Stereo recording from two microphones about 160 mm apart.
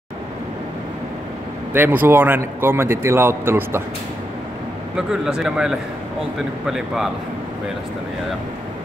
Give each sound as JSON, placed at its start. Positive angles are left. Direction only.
{"t": 1.7, "sound": "a man's voice", "side_deg": -10}
{"t": 4.9, "sound": "speech", "side_deg": -5}